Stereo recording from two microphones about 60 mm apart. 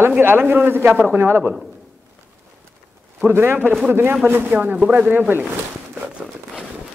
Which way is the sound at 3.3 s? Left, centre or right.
Right.